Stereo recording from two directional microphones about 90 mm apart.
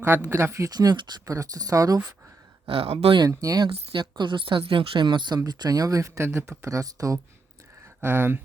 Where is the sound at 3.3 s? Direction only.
40° right (ahead or behind).